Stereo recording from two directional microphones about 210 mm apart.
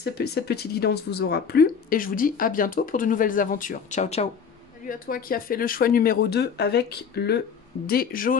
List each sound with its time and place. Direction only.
0.0 s speech: 50° left (ahead or behind)